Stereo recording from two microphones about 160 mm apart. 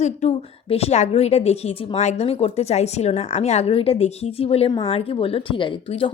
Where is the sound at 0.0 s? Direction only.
45° left (ahead or behind).